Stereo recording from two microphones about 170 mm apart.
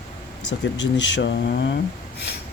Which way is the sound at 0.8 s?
90° left.